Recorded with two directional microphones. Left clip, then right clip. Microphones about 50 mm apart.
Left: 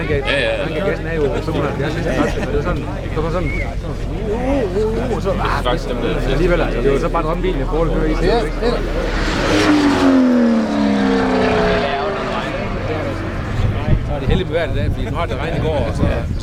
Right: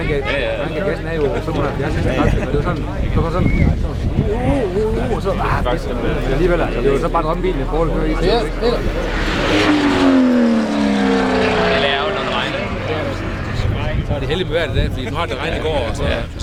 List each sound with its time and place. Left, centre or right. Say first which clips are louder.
1.1 s speech: even; right
6.4 s speech: even; right
6.7 s speech: even; centre
9.2 s vehicle: even; centre
11.9 s vehicle: right 2 dB; centre
12.1 s vehicle: right 2 dB; centre
14.3 s a man's voice: even; right